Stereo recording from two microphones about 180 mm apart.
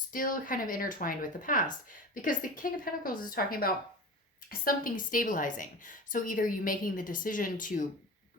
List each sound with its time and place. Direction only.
0.1 s a woman's voice: 50° left (ahead or behind)